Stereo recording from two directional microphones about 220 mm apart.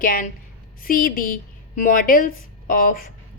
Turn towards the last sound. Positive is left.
turn(degrees=40)  # may be behind; listen again after turning